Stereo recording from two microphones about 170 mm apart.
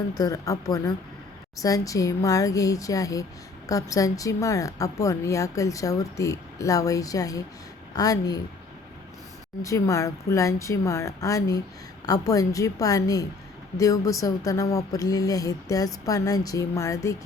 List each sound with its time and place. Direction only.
0.2 s a woman's voice: 20° left (ahead or behind)
9.6 s a woman's voice: 20° left (ahead or behind)